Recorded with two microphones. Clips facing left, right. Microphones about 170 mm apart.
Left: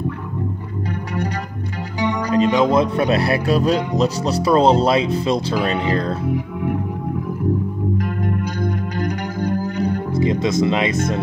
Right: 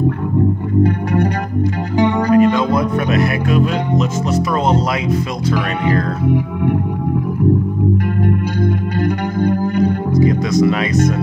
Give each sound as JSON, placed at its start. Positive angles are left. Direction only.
{"t": 0.8, "sound": "music", "side_deg": -55}
{"t": 2.3, "sound": "speech", "side_deg": 20}
{"t": 8.2, "sound": "music", "side_deg": -60}
{"t": 10.1, "sound": "speech", "side_deg": 25}